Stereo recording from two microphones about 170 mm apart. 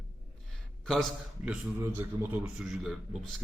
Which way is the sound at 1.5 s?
10° right (ahead or behind).